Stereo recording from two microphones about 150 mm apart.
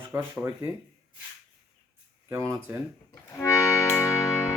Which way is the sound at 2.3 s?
20° right (ahead or behind).